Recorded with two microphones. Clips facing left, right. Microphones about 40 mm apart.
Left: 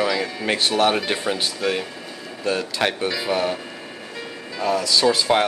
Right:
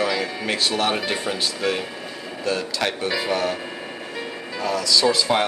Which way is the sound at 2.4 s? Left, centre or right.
Centre.